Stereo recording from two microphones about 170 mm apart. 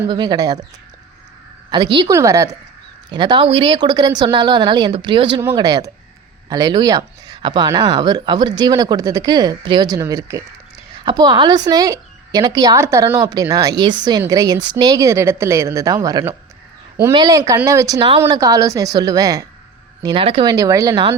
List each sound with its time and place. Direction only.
0.1 s a woman's voice: 25° right (ahead or behind)
1.7 s a woman's voice: 25° right (ahead or behind)